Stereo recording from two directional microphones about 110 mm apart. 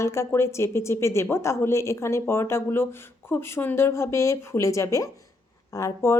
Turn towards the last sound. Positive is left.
turn(degrees=30)  # may be behind; listen again after turning